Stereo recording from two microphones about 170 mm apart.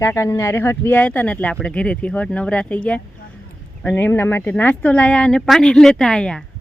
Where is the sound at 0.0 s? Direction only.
15° left (ahead or behind).